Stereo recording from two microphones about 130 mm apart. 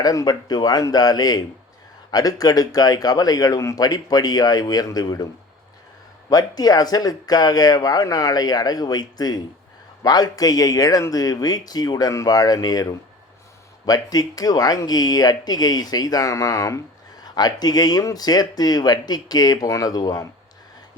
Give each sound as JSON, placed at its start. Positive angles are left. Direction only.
{"t": 0.0, "sound": "speech", "side_deg": 30}
{"t": 6.3, "sound": "speech", "side_deg": 30}